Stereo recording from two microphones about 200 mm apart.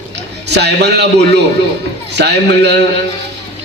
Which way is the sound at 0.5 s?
55° right (ahead or behind).